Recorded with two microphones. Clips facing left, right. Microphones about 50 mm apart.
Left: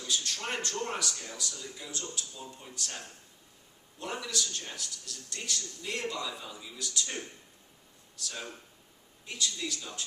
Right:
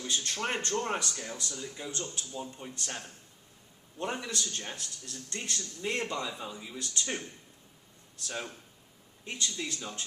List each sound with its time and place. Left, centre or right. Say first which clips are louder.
0.0 s a man's voice: right 2 dB; right
9.2 s a man's voice: even; right